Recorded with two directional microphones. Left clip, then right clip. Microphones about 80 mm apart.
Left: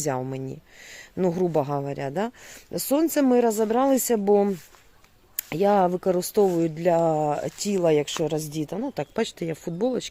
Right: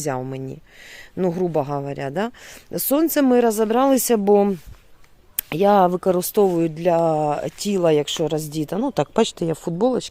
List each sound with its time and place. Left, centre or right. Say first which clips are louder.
0.0 s speech: right 2 dB; right
1.8 s speech: right 3 dB; right
5.4 s speech: right 5 dB; right
6.7 s speech: right 2 dB; right
9.3 s speech: right 6 dB; right